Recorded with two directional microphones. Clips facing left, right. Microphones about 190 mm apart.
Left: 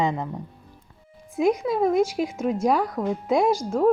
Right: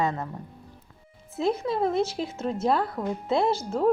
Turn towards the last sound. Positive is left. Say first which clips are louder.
# left 4 dB
turn(degrees=10)  # may be behind; listen again after turning